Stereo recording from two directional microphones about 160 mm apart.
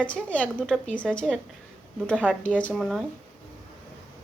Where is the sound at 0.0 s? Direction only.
10° left (ahead or behind).